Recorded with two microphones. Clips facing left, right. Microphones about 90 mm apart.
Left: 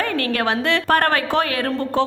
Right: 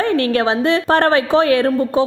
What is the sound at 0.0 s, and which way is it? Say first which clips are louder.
A woman's voice: right 5 dB; 25° right (ahead or behind).